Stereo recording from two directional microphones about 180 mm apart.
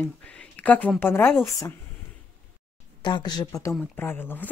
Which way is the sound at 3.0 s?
25° left (ahead or behind).